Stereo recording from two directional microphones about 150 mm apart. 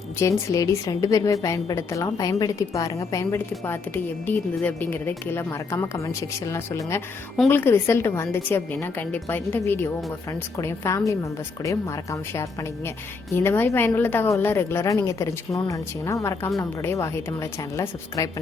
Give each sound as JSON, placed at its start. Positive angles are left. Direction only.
{"t": 0.2, "sound": "a woman's voice", "side_deg": 20}